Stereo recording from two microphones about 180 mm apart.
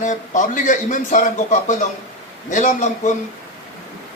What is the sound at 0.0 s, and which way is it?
Speech, 45° left (ahead or behind).